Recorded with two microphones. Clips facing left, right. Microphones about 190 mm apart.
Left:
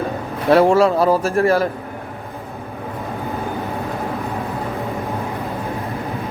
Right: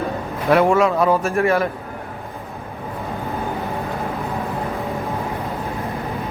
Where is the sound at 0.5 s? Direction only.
30° left (ahead or behind).